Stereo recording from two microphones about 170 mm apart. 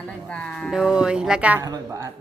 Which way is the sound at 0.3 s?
5° left (ahead or behind).